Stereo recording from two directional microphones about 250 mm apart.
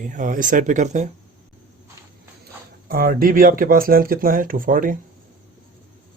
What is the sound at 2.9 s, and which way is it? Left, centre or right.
Speech, right.